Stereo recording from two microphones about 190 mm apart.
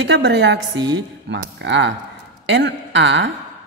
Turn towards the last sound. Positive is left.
turn(degrees=-70)  # may be behind; listen again after turning